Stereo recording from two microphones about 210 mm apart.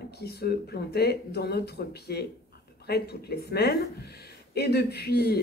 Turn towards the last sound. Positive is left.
turn(degrees=50)  # may be behind; listen again after turning